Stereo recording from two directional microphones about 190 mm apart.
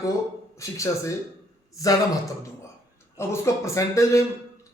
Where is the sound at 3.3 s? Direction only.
15° left (ahead or behind).